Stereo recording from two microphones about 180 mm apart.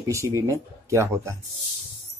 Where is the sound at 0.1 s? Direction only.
15° right (ahead or behind).